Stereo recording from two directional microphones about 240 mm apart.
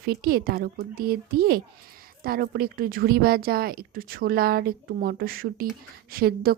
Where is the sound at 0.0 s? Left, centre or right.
Right.